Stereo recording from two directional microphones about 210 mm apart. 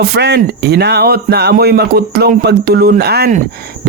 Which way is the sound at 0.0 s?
50° right (ahead or behind).